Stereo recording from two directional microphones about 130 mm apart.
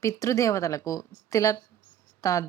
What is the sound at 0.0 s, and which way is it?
A woman's voice, 25° left (ahead or behind).